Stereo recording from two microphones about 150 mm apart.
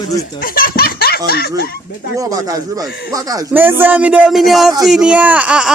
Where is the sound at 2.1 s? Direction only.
25° right (ahead or behind).